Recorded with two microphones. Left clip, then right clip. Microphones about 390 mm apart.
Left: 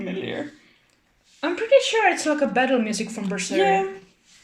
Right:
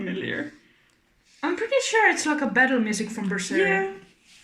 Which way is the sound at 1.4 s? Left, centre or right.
Centre.